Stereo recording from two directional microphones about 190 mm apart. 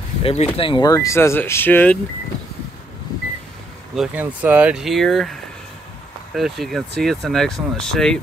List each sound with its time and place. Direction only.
0.2 s speech: 30° left (ahead or behind); by 2.0 s 10° left (ahead or behind)
3.9 s speech: 5° right (ahead or behind)